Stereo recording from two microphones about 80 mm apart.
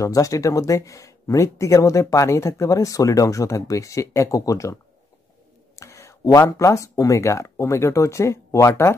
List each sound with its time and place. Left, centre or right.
0.0 s speech: left
5.8 s a sound: left
6.5 s speech: left